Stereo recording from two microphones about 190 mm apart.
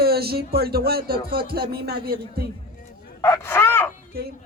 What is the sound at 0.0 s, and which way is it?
Music, 55° right (ahead or behind).